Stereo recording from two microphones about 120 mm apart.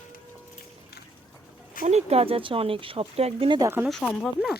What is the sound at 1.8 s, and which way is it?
Speech, 65° right (ahead or behind).